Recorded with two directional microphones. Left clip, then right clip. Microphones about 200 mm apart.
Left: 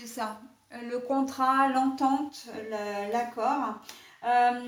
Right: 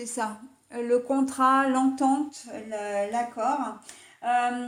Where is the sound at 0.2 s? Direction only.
45° right (ahead or behind).